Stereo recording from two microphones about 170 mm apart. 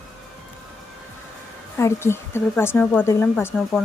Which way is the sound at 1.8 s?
15° left (ahead or behind).